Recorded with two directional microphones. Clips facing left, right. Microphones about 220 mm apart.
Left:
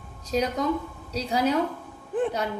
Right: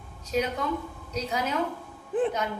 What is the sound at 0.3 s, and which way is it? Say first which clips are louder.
A woman's voice: left 3 dB; 35° left (ahead or behind).